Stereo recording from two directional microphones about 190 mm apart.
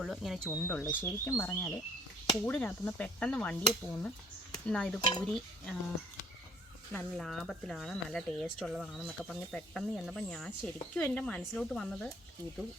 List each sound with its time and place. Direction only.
0.0 s speech: centre (ahead or behind)
4.9 s speech: 25° left (ahead or behind)
5.2 s speech: 5° left (ahead or behind)
6.9 s speech: centre (ahead or behind)